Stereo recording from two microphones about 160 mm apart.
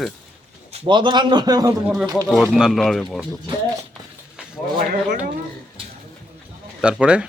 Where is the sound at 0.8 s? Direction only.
30° right (ahead or behind).